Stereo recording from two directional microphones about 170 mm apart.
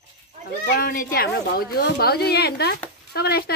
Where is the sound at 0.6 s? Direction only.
55° left (ahead or behind).